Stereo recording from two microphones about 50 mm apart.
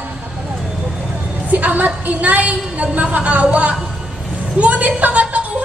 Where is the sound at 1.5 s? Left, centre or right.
Right.